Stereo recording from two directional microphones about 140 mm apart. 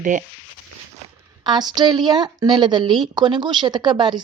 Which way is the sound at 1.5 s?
30° right (ahead or behind).